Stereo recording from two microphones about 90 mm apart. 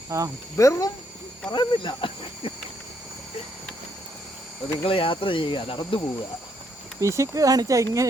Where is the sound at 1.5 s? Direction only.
60° left (ahead or behind).